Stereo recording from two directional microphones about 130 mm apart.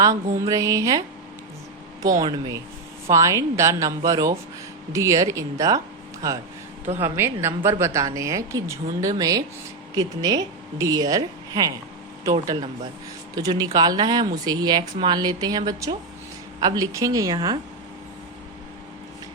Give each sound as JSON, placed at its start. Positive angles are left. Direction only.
{"t": 0.0, "sound": "a woman's voice", "side_deg": -25}
{"t": 6.8, "sound": "a woman's voice", "side_deg": -15}